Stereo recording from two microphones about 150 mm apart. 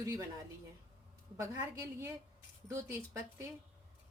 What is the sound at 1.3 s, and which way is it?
Speech, 20° right (ahead or behind).